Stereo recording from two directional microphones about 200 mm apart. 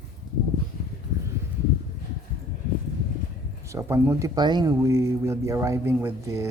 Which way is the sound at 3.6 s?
15° right (ahead or behind).